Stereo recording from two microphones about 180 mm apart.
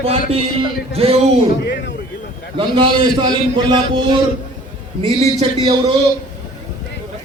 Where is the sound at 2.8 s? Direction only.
25° right (ahead or behind).